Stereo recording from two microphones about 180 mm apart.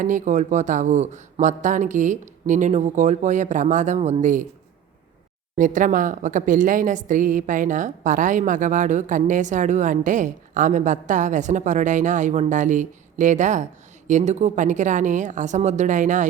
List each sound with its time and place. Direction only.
0.0 s a woman's voice: 45° right (ahead or behind)
5.5 s a woman's voice: 45° right (ahead or behind)